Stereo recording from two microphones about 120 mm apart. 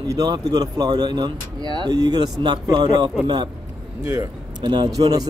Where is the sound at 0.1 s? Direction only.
35° right (ahead or behind).